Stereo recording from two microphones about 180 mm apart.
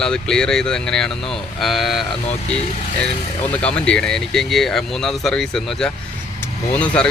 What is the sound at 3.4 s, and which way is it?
Speech, 5° left (ahead or behind).